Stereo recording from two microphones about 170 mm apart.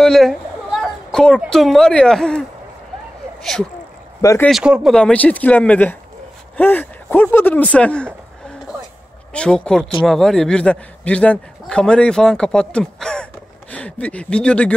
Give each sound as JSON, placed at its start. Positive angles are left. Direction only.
{"t": 0.0, "sound": "speech", "side_deg": 0}
{"t": 4.2, "sound": "speech", "side_deg": 20}
{"t": 4.5, "sound": "speech", "side_deg": -5}
{"t": 9.3, "sound": "a man's voice", "side_deg": 5}